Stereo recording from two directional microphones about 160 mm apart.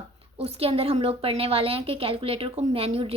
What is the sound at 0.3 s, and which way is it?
A woman's voice, 40° right (ahead or behind).